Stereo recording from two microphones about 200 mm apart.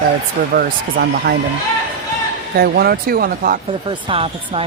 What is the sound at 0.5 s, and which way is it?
Speech, 50° right (ahead or behind).